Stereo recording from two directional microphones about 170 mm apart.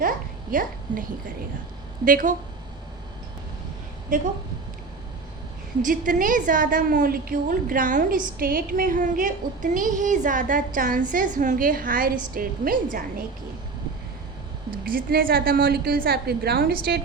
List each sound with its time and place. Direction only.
0.5 s a woman's voice: 55° right (ahead or behind)
2.0 s a woman's voice: 55° right (ahead or behind)
4.1 s a woman's voice: 50° right (ahead or behind)
5.8 s a woman's voice: 50° right (ahead or behind)
14.8 s a woman's voice: 60° right (ahead or behind)